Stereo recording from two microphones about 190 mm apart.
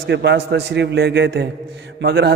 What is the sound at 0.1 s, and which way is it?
A man's voice, 60° right (ahead or behind).